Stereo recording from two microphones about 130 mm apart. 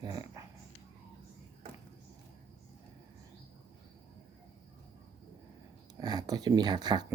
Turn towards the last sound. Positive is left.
turn(degrees=-30)  # may be behind; listen again after turning